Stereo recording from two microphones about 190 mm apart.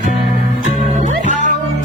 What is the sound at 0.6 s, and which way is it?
Music, 40° right (ahead or behind).